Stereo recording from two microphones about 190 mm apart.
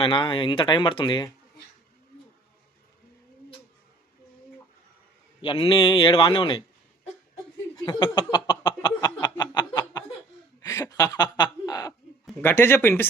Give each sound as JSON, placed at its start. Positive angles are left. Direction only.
{"t": 0.0, "sound": "a man's voice", "side_deg": 25}
{"t": 5.4, "sound": "a man's voice", "side_deg": 30}
{"t": 7.9, "sound": "a man's voice", "side_deg": 25}
{"t": 8.4, "sound": "a sound", "side_deg": 25}
{"t": 10.6, "sound": "chuckle", "side_deg": 20}
{"t": 12.4, "sound": "speech", "side_deg": 10}